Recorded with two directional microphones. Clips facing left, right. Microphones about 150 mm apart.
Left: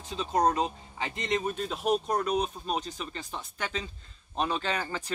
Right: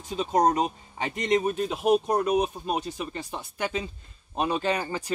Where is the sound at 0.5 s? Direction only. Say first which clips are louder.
Right 3 dB; 15° right (ahead or behind).